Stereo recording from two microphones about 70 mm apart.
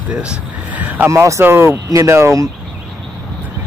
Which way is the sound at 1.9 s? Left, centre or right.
Right.